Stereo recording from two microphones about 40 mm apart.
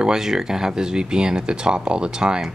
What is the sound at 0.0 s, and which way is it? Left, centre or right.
Speech, centre.